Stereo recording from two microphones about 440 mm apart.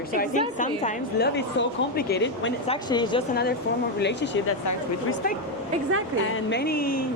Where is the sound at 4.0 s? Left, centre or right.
Left.